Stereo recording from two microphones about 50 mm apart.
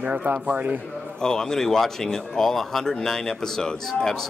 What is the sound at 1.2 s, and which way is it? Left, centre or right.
Speech, centre.